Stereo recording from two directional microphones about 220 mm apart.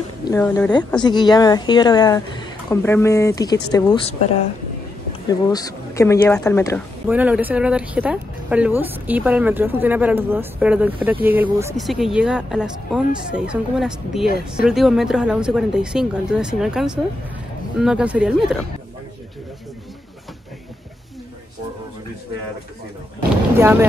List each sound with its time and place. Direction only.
0.3 s speech: 10° left (ahead or behind)
5.5 s speech: 15° left (ahead or behind)
7.1 s speech: 5° right (ahead or behind)
11.8 s speech: centre (ahead or behind)
23.5 s speech: 10° right (ahead or behind)